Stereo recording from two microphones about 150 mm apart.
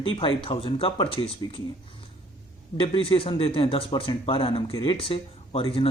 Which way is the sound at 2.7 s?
35° left (ahead or behind).